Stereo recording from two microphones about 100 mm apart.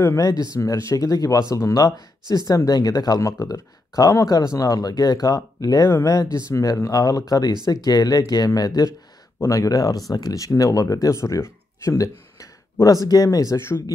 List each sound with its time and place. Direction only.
0.2 s speech: 40° left (ahead or behind)